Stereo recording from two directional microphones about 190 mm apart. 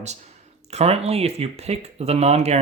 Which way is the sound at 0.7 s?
35° right (ahead or behind).